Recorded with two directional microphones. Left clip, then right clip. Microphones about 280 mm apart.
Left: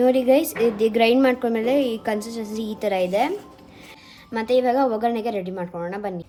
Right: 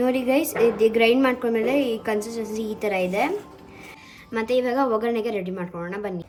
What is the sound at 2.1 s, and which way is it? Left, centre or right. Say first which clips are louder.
Speech: right 2 dB; centre.